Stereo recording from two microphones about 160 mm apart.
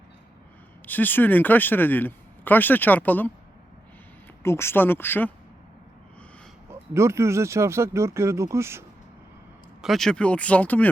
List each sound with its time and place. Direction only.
0.9 s speech: 10° left (ahead or behind)
4.4 s speech: 15° left (ahead or behind)
6.7 s speech: 15° right (ahead or behind)
9.8 s speech: centre (ahead or behind)